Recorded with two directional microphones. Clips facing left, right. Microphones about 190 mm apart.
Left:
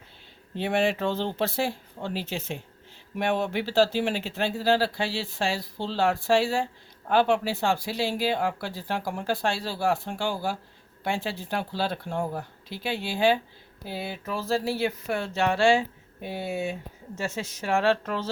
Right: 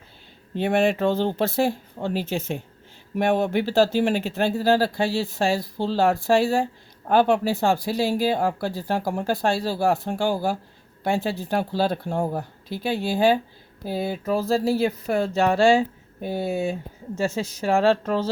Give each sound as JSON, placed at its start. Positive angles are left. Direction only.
{"t": 0.5, "sound": "speech", "side_deg": -50}